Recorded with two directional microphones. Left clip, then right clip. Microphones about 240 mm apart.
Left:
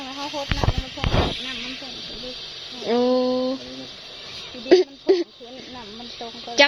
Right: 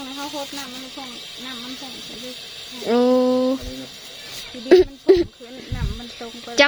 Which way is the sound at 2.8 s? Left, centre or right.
Centre.